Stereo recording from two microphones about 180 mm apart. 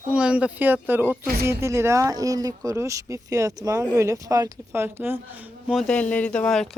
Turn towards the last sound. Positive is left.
turn(degrees=5)  # may be behind; listen again after turning